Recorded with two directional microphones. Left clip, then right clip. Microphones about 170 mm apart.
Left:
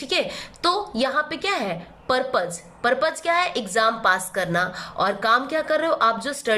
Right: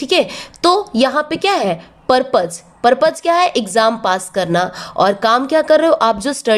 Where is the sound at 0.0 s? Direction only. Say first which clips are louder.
Right 9 dB; 35° right (ahead or behind).